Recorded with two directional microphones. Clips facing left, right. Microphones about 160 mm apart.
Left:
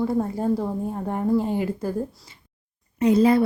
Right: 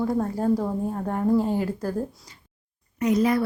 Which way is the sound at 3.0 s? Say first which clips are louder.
Left 4 dB; 30° left (ahead or behind).